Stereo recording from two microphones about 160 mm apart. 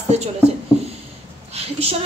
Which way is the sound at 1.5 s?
40° right (ahead or behind).